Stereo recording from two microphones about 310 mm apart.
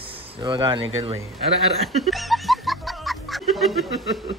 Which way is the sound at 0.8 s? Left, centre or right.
Right.